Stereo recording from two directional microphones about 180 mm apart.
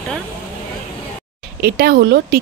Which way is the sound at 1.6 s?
55° right (ahead or behind).